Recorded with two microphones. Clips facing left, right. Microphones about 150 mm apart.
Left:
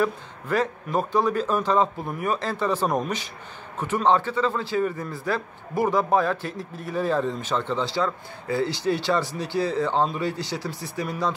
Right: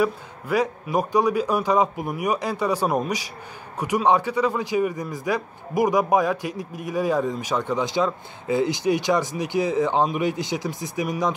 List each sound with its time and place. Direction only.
0.0 s a man's voice: 10° right (ahead or behind)